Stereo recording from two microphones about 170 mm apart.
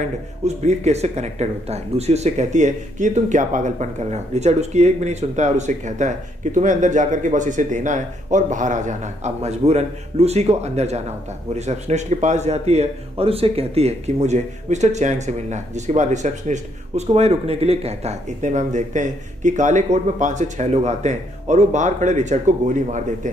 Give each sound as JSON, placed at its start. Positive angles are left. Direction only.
{"t": 0.7, "sound": "speech", "side_deg": -40}